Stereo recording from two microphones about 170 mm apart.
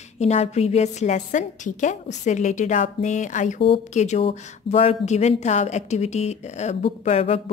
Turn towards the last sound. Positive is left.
turn(degrees=40)  # may be behind; listen again after turning